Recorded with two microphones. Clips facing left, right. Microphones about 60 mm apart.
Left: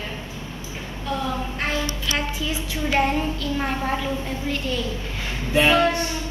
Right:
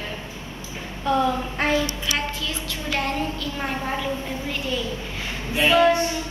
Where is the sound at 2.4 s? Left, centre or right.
Centre.